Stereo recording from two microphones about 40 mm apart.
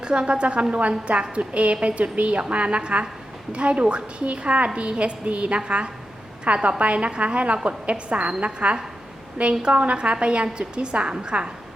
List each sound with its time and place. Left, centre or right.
0.0 s a woman's voice: right